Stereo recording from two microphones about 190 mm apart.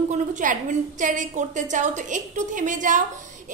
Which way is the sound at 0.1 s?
40° right (ahead or behind).